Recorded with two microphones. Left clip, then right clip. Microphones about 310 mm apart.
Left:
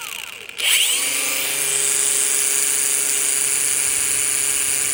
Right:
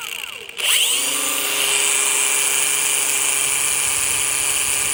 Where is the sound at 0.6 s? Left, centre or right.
Right.